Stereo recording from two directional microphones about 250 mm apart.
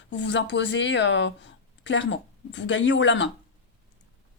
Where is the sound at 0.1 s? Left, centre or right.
Left.